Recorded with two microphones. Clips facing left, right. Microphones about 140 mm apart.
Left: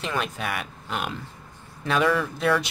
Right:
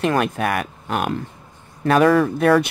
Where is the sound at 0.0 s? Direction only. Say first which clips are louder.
Right 9 dB; 55° right (ahead or behind).